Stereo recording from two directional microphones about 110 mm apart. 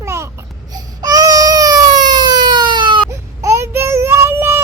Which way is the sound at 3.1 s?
25° right (ahead or behind).